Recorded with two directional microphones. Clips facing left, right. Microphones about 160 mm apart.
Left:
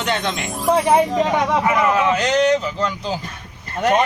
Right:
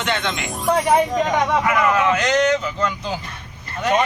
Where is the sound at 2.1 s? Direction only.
30° left (ahead or behind).